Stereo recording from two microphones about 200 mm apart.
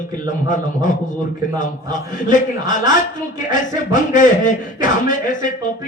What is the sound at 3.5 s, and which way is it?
A man's voice, 40° left (ahead or behind).